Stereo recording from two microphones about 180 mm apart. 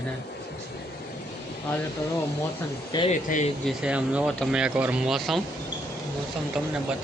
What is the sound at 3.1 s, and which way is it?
Speech, 40° left (ahead or behind).